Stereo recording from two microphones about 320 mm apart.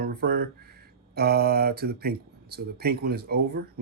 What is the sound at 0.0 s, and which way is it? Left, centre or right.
A man's voice, right.